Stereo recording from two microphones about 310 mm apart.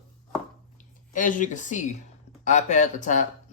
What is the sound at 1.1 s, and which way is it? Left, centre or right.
Speech, left.